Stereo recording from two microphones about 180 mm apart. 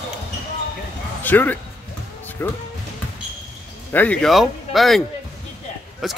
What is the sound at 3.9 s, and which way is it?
Speech, 10° left (ahead or behind).